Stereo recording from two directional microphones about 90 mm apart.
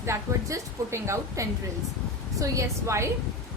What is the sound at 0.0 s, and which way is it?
A woman's voice, 35° right (ahead or behind).